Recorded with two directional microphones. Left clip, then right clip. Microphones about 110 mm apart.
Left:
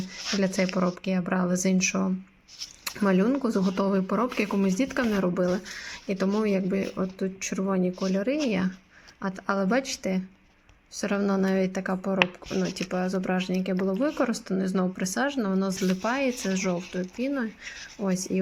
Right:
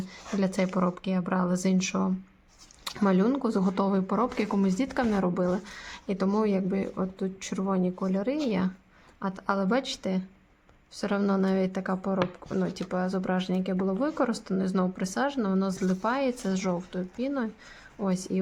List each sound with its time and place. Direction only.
0.3 s speech: 5° right (ahead or behind)
0.7 s speech: 20° right (ahead or behind)
1.0 s speech: 5° right (ahead or behind)